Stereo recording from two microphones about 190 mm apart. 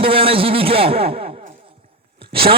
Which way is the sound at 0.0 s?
30° right (ahead or behind).